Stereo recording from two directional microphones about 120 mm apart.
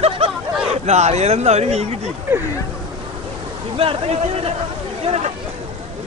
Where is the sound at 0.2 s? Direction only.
60° right (ahead or behind).